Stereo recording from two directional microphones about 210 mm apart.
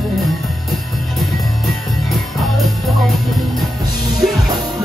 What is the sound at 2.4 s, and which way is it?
Music, centre (ahead or behind).